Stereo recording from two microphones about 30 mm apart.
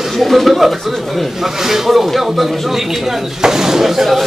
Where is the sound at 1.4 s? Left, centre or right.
Centre.